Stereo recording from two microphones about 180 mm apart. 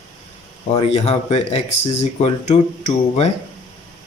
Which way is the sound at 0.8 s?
35° left (ahead or behind).